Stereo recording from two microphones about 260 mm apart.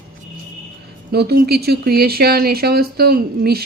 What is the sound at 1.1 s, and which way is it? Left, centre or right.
Speech, right.